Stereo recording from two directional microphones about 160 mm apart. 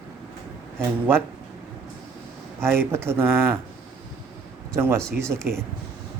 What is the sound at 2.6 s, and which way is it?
Speech, 15° right (ahead or behind).